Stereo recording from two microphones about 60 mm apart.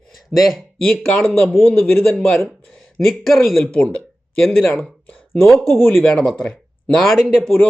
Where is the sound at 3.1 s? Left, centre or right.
Centre.